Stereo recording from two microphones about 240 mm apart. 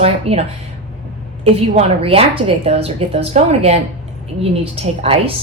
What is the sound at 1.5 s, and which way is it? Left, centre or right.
A woman's voice, right.